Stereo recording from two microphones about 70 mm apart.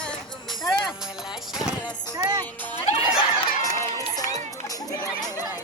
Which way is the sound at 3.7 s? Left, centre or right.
Left.